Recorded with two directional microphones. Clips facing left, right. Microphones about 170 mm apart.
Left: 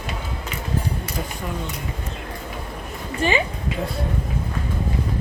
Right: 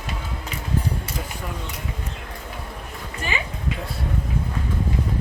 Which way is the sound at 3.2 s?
30° left (ahead or behind).